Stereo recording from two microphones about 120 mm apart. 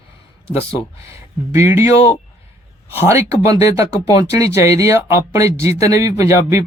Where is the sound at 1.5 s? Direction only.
25° right (ahead or behind).